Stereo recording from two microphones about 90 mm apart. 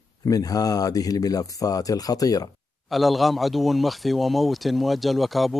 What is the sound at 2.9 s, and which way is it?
Speech, centre (ahead or behind).